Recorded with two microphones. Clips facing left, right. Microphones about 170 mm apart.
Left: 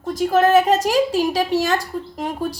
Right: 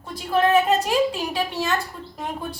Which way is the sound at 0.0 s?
45° left (ahead or behind).